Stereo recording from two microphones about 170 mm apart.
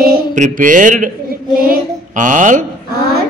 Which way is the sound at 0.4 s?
50° right (ahead or behind).